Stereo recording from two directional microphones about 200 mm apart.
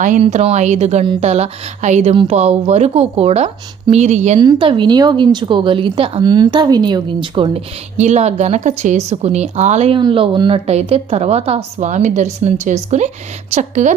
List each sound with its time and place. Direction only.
0.0 s a woman's voice: 35° right (ahead or behind)
4.4 s a woman's voice: 25° right (ahead or behind)